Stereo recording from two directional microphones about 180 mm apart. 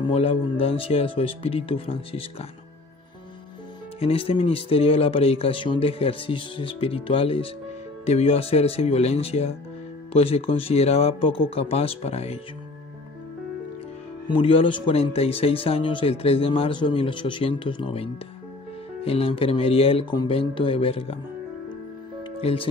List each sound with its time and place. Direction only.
0.0 s speech: 30° left (ahead or behind)
4.0 s speech: 35° left (ahead or behind)
14.2 s speech: 30° left (ahead or behind)
22.4 s speech: 30° left (ahead or behind)